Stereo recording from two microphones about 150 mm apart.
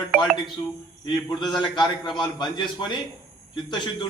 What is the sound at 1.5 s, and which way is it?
A man's voice, 30° left (ahead or behind).